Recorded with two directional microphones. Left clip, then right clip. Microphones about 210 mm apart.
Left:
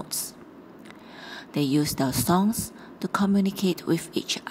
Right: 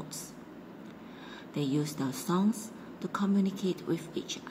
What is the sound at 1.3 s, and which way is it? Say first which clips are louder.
Speech: left 8 dB; 30° left (ahead or behind).